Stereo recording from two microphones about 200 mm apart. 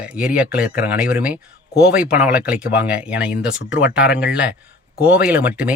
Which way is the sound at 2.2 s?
5° right (ahead or behind).